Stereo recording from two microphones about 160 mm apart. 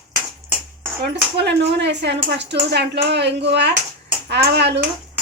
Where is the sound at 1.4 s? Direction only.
90° right.